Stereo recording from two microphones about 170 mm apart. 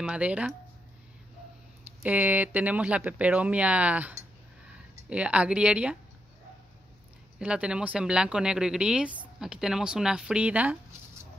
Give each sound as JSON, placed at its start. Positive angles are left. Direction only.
{"t": 0.0, "sound": "speech", "side_deg": -5}
{"t": 2.0, "sound": "speech", "side_deg": -10}
{"t": 7.3, "sound": "speech", "side_deg": -5}